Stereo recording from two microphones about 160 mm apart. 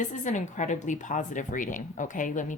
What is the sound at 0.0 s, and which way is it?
Speech, 50° left (ahead or behind).